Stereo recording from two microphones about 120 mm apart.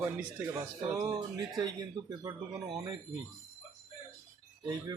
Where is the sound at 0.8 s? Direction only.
30° right (ahead or behind).